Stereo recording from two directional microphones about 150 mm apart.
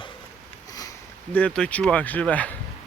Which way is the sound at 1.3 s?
5° left (ahead or behind).